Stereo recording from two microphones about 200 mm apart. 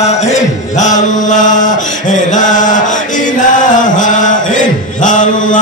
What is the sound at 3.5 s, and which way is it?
Chant, 40° left (ahead or behind).